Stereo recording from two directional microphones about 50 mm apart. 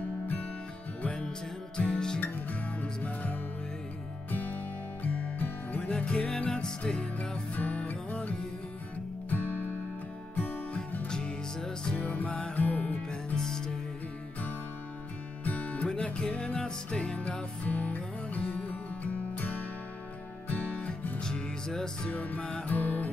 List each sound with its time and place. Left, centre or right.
1.0 s music: centre
2.8 s music: left
5.9 s music: left
7.0 s music: left
11.1 s music: centre
12.0 s music: left
12.5 s music: left
13.1 s music: centre
15.4 s music: left
20.4 s music: left
21.2 s music: centre
22.1 s music: left
22.7 s music: left